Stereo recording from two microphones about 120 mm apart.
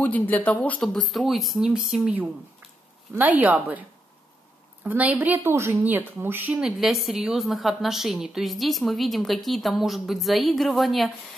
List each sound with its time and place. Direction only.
0.0 s speech: 15° left (ahead or behind)
1.0 s a woman's voice: centre (ahead or behind)
4.8 s a woman's voice: 15° right (ahead or behind)
6.6 s a woman's voice: centre (ahead or behind)